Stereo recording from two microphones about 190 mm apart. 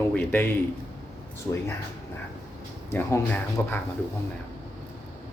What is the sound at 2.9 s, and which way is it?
Speech, 10° left (ahead or behind).